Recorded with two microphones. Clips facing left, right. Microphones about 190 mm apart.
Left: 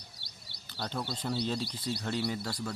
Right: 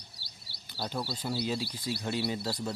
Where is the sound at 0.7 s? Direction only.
10° right (ahead or behind).